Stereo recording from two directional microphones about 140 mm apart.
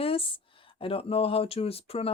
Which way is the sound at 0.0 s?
40° left (ahead or behind).